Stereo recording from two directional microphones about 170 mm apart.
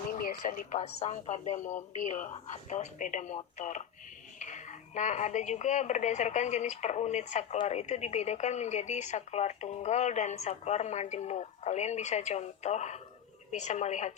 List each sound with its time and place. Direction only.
0.2 s a woman's voice: 55° left (ahead or behind)